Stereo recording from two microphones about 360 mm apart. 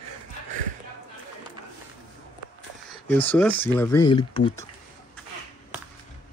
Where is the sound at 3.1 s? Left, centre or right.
Centre.